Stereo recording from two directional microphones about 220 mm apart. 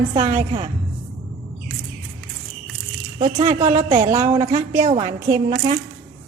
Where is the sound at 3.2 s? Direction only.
30° right (ahead or behind).